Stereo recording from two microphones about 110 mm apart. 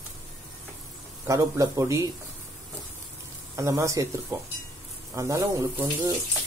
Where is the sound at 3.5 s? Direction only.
30° right (ahead or behind).